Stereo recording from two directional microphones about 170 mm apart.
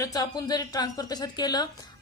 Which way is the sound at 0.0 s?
20° left (ahead or behind).